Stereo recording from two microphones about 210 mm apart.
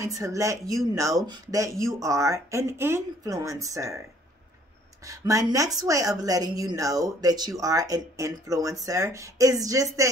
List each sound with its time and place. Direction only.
0.0 s a woman's voice: 15° right (ahead or behind)
5.0 s a woman's voice: 15° right (ahead or behind)